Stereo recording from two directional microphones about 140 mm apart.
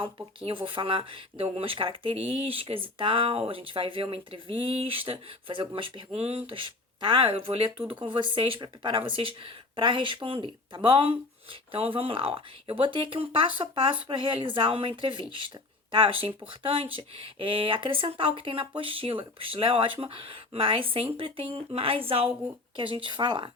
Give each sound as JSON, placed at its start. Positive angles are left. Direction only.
{"t": 0.3, "sound": "speech", "side_deg": -40}